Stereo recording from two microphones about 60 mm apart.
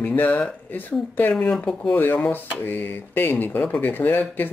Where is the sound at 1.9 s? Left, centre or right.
Left.